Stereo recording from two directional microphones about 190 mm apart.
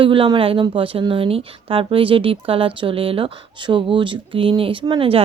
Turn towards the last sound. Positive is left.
turn(degrees=-30)  # may be behind; listen again after turning